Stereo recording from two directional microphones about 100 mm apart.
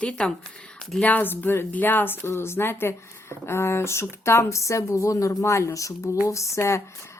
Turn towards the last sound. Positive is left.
turn(degrees=30)  # may be behind; listen again after turning